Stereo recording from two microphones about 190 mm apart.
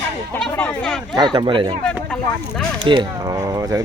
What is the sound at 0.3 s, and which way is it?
Speech, 5° left (ahead or behind).